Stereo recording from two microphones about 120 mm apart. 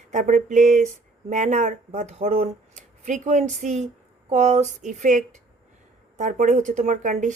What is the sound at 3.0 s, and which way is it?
Speech, 90° right.